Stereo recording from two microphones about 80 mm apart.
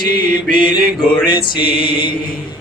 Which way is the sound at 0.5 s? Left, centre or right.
Left.